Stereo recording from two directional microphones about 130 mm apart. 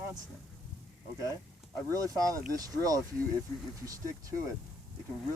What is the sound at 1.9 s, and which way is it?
Speech, 25° right (ahead or behind).